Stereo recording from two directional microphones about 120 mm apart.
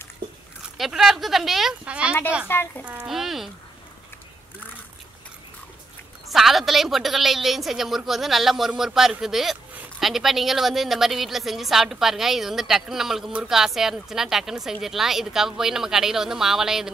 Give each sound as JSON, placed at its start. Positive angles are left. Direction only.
{"t": 0.7, "sound": "a woman's voice", "side_deg": 0}
{"t": 2.4, "sound": "speech", "side_deg": 20}
{"t": 2.8, "sound": "a woman's voice", "side_deg": -10}
{"t": 6.3, "sound": "a woman's voice", "side_deg": 0}